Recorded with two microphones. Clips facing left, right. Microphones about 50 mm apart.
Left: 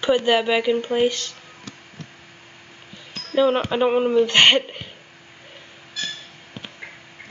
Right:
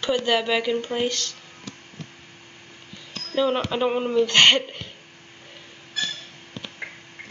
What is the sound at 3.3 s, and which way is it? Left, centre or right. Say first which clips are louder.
Speech: left 4 dB; centre.